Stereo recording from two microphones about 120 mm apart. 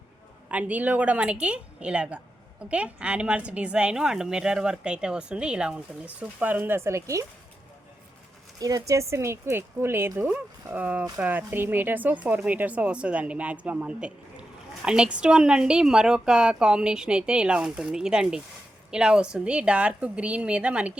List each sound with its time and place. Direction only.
0.4 s a woman's voice: 10° right (ahead or behind)
8.5 s a woman's voice: 30° right (ahead or behind); by 20.9 s 10° right (ahead or behind)